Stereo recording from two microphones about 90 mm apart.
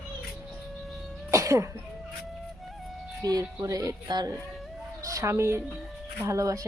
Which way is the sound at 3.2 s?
45° right (ahead or behind).